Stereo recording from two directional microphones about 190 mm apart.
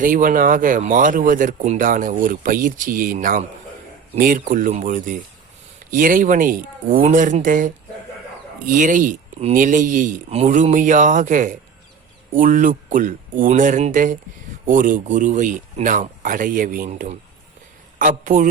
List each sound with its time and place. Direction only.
0.0 s speech: 45° right (ahead or behind)